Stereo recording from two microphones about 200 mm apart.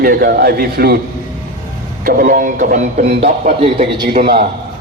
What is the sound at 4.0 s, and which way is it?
Speech, 50° right (ahead or behind).